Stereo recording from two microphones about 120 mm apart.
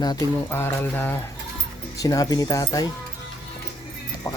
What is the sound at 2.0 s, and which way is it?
Speech, 30° left (ahead or behind).